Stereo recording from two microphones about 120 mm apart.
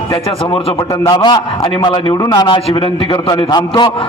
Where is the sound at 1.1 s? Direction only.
35° left (ahead or behind).